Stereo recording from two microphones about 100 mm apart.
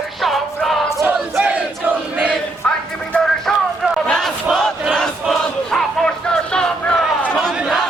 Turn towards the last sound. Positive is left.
turn(degrees=10)  # may be behind; listen again after turning